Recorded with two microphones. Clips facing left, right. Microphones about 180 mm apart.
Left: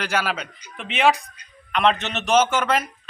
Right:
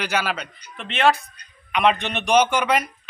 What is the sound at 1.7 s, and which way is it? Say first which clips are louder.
A man's voice: right 1 dB; 10° right (ahead or behind).